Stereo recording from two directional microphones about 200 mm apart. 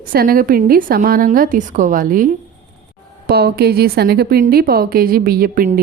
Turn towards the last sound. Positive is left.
turn(degrees=-45)  # may be behind; listen again after turning